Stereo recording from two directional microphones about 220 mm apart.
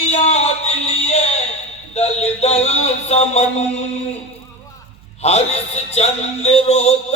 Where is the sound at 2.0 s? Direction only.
30° left (ahead or behind).